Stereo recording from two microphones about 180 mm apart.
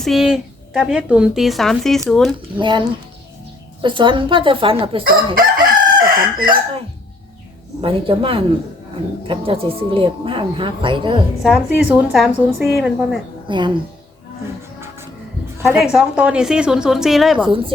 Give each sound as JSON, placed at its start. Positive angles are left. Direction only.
{"t": 0.0, "sound": "speech", "side_deg": 0}
{"t": 2.6, "sound": "speech", "side_deg": -25}
{"t": 5.0, "sound": "chicken", "side_deg": -55}
{"t": 7.8, "sound": "speech", "side_deg": -30}
{"t": 11.4, "sound": "speech", "side_deg": -5}
{"t": 13.5, "sound": "speech", "side_deg": -25}
{"t": 15.6, "sound": "speech", "side_deg": -5}